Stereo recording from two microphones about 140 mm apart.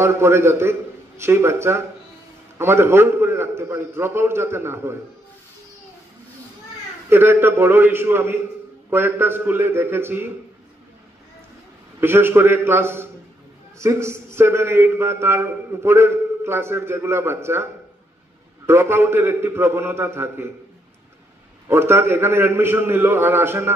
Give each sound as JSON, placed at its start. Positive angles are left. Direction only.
{"t": 0.0, "sound": "a man's voice", "side_deg": -20}
{"t": 7.1, "sound": "a man's voice", "side_deg": -15}
{"t": 12.0, "sound": "a man's voice", "side_deg": -15}
{"t": 18.7, "sound": "a man's voice", "side_deg": -15}
{"t": 21.6, "sound": "a man's voice", "side_deg": -15}